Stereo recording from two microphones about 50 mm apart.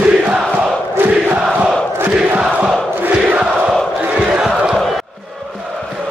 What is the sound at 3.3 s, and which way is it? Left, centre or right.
Crowd, right.